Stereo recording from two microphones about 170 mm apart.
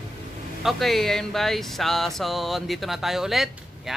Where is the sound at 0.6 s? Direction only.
Centre (ahead or behind).